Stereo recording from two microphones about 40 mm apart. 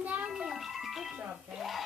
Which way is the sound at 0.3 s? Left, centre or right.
Centre.